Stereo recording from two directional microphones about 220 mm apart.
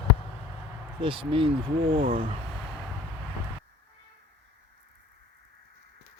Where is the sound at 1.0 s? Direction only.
25° right (ahead or behind).